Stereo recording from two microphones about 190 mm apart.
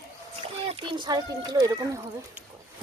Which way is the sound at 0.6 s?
25° right (ahead or behind).